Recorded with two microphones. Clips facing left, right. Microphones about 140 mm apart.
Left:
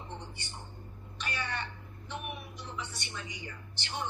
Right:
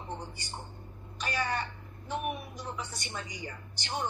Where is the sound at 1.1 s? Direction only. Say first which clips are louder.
Right 5 dB; 40° right (ahead or behind).